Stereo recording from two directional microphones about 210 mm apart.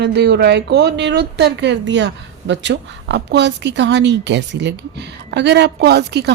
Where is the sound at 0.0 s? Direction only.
50° right (ahead or behind).